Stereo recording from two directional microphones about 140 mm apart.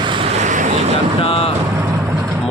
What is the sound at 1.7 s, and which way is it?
Vehicle, 20° right (ahead or behind).